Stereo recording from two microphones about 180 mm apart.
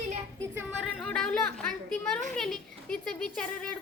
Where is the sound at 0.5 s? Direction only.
10° right (ahead or behind).